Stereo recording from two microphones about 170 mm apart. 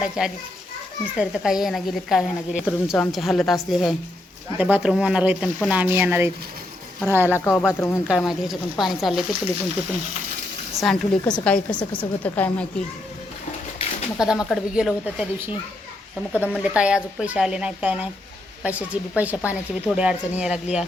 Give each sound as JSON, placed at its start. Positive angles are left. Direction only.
{"t": 0.2, "sound": "a woman's voice", "side_deg": -5}
{"t": 7.3, "sound": "a woman's voice", "side_deg": 15}
{"t": 8.0, "sound": "a woman's voice", "side_deg": -5}
{"t": 10.8, "sound": "a woman's voice", "side_deg": 0}
{"t": 14.2, "sound": "a woman's voice", "side_deg": -5}
{"t": 16.3, "sound": "a woman's voice", "side_deg": -5}